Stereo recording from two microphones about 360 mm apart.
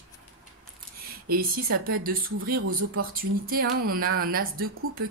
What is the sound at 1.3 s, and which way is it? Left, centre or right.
Speech, right.